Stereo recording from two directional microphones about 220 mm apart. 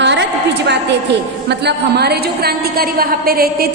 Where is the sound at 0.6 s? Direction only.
50° right (ahead or behind).